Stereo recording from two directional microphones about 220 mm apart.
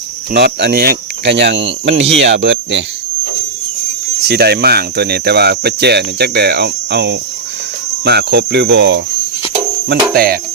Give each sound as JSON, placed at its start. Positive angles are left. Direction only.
{"t": 0.3, "sound": "speech", "side_deg": -45}
{"t": 4.2, "sound": "speech", "side_deg": -45}